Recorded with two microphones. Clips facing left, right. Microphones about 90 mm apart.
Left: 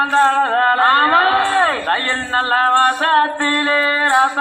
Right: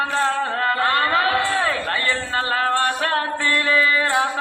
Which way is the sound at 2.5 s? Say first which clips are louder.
Left 7 dB; 40° left (ahead or behind).